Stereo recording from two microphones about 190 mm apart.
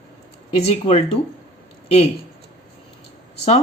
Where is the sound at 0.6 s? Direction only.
30° left (ahead or behind).